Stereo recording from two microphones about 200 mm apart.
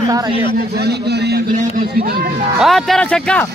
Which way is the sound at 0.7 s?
55° right (ahead or behind).